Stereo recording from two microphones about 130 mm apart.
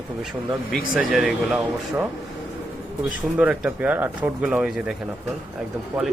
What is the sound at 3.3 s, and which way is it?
Speech, 10° right (ahead or behind).